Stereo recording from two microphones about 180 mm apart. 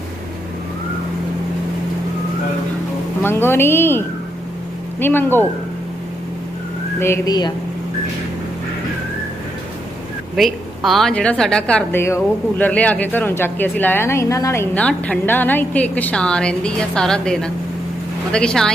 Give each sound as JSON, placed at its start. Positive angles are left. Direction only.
{"t": 3.2, "sound": "a woman's voice", "side_deg": 15}
{"t": 7.0, "sound": "speech", "side_deg": 20}
{"t": 10.3, "sound": "a woman's voice", "side_deg": 0}